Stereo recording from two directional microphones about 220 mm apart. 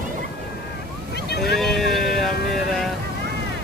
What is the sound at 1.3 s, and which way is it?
Vehicle, 45° left (ahead or behind).